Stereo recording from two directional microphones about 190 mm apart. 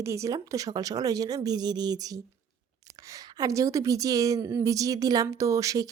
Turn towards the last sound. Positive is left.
turn(degrees=-20)  # may be behind; listen again after turning